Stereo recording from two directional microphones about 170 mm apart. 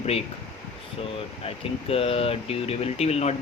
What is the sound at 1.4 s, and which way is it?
Speech, 35° left (ahead or behind).